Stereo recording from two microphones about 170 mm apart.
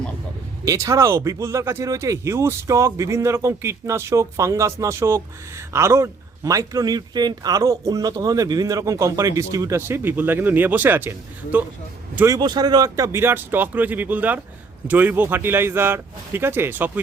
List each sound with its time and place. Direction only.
0.6 s speech: 20° right (ahead or behind)